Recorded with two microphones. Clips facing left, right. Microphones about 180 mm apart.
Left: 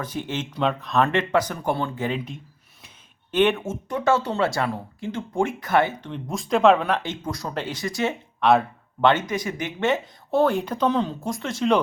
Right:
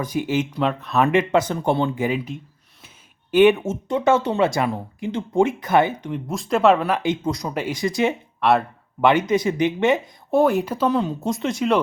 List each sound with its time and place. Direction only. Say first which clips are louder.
0.0 s speech: right 7 dB; 10° right (ahead or behind)
2.0 s speech: right 4 dB; 5° right (ahead or behind)
3.7 s speech: right 3 dB; 20° right (ahead or behind)
6.1 s speech: right 2 dB; 5° right (ahead or behind)
8.4 s speech: left 1 dB; 5° right (ahead or behind)
9.2 s speech: right 9 dB; 25° right (ahead or behind); by 11.1 s 5° right (ahead or behind)
11.2 s speech: right 5 dB; 20° right (ahead or behind)